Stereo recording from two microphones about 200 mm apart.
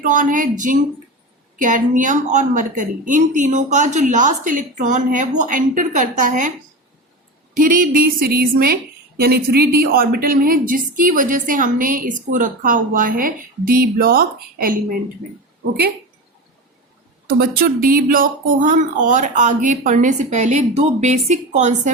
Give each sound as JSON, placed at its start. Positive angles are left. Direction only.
{"t": 0.0, "sound": "a woman's voice", "side_deg": -40}
{"t": 7.5, "sound": "a woman's voice", "side_deg": -45}
{"t": 17.2, "sound": "a woman's voice", "side_deg": -50}